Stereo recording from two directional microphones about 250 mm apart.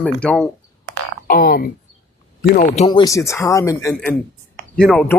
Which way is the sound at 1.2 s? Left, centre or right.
Left.